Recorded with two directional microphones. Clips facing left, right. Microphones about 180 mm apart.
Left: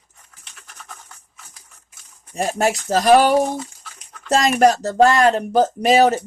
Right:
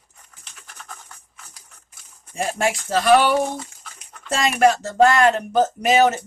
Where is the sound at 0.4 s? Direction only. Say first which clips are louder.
Even; centre (ahead or behind).